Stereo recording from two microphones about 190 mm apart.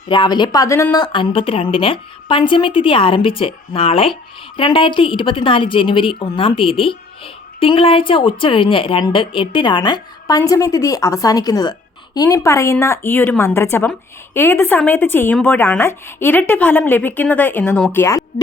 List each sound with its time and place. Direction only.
0.1 s speech: 25° left (ahead or behind)